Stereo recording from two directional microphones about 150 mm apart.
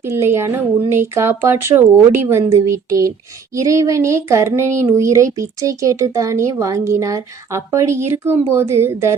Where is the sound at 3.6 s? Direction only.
20° right (ahead or behind).